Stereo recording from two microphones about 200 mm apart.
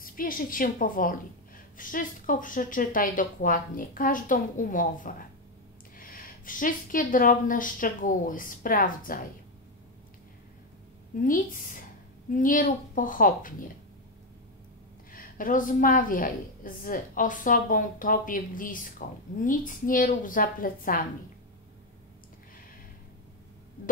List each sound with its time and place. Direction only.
0.0 s a woman's voice: 45° left (ahead or behind)
11.1 s a woman's voice: 40° left (ahead or behind)
15.0 s a woman's voice: 45° left (ahead or behind)